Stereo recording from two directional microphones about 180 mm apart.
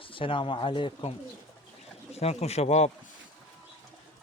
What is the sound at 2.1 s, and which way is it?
Speech, 35° left (ahead or behind).